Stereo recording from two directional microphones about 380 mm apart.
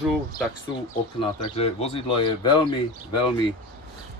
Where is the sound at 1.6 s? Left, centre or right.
Centre.